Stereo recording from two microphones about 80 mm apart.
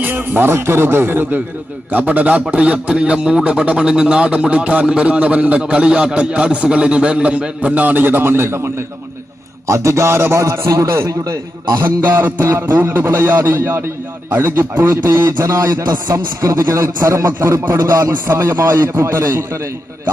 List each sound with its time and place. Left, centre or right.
0.0 s a man's voice: right
11.8 s a man's voice: right
15.0 s a man's voice: right
15.8 s speech: right
16.1 s a man's voice: right